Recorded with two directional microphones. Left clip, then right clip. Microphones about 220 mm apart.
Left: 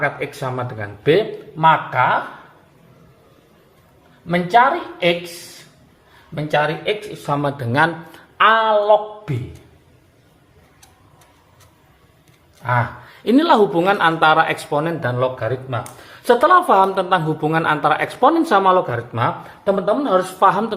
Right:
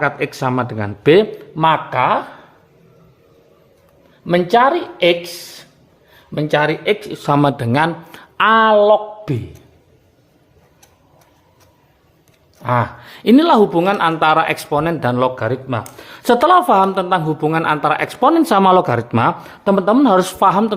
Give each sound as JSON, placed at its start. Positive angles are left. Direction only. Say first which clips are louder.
{"t": 0.0, "sound": "speech", "louder": "right 4 dB", "side_deg": -45}
{"t": 4.3, "sound": "speech", "louder": "right 2 dB", "side_deg": -50}
{"t": 6.3, "sound": "speech", "louder": "right 3 dB", "side_deg": -50}
{"t": 8.4, "sound": "speech", "louder": "right 3 dB", "side_deg": -50}
{"t": 12.6, "sound": "speech", "louder": "right 2 dB", "side_deg": -50}
{"t": 13.2, "sound": "speech", "louder": "right 3 dB", "side_deg": -30}
{"t": 16.5, "sound": "speech", "louder": "right 2 dB", "side_deg": -30}
{"t": 20.4, "sound": "speech", "louder": "left 1 dB", "side_deg": -30}